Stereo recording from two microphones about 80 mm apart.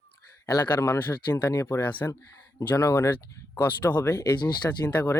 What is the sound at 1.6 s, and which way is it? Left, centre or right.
Speech, left.